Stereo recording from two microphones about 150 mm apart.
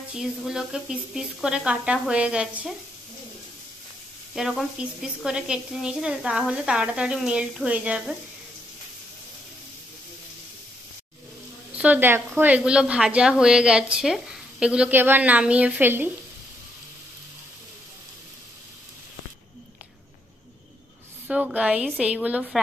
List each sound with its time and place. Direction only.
0.1 s speech: 5° right (ahead or behind)
4.4 s speech: centre (ahead or behind)
11.7 s a woman's voice: 10° right (ahead or behind)
21.3 s a woman's voice: 5° right (ahead or behind)